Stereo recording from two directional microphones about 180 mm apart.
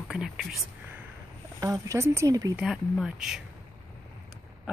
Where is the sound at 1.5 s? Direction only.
20° right (ahead or behind).